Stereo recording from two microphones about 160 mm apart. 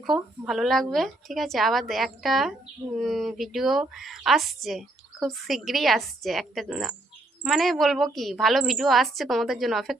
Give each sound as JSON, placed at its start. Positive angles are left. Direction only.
{"t": 0.0, "sound": "a woman's voice", "side_deg": 0}